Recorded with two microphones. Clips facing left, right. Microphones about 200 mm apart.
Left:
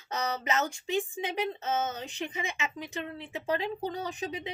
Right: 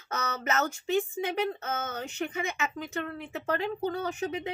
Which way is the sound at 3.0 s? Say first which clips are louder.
Right 1 dB; 15° left (ahead or behind).